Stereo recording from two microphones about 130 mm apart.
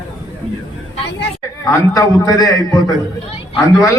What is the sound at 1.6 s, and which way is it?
A man's voice, 25° left (ahead or behind).